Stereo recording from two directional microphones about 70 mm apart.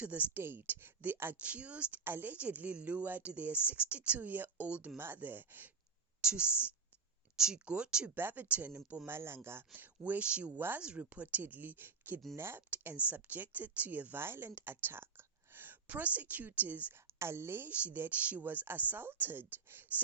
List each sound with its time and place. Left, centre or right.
0.0 s a woman's voice: right
0.4 s speech: right
1.4 s a woman's voice: centre
6.2 s speech: centre
8.1 s a woman's voice: right
9.0 s a woman's voice: right
12.4 s speech: right
12.7 s a woman's voice: right
17.2 s speech: right
17.7 s a woman's voice: right